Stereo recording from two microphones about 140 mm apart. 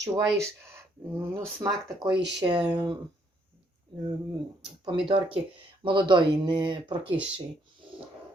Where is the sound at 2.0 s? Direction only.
35° right (ahead or behind).